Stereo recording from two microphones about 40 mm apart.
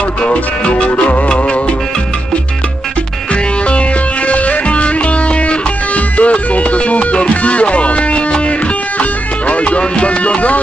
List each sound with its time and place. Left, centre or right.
0.2 s music: left
4.3 s music: left